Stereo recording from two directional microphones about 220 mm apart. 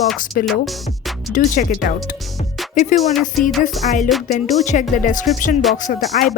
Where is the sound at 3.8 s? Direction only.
35° left (ahead or behind).